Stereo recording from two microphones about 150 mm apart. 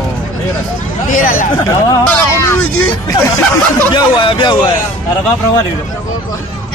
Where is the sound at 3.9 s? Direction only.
30° left (ahead or behind).